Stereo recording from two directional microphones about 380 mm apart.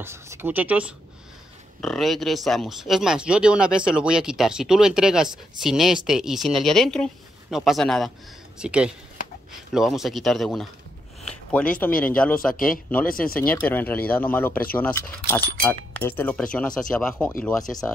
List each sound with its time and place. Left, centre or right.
0.0 s speech: centre
12.5 s speech: left
13.6 s speech: centre